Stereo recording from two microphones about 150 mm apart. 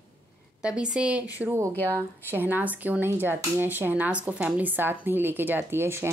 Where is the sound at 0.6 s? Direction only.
5° right (ahead or behind).